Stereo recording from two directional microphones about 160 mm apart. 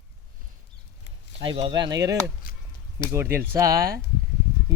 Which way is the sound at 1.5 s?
30° right (ahead or behind).